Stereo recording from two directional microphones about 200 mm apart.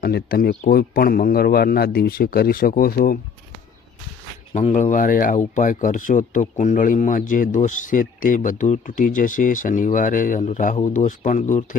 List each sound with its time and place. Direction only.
0.0 s a man's voice: 50° left (ahead or behind)
4.5 s speech: 35° left (ahead or behind)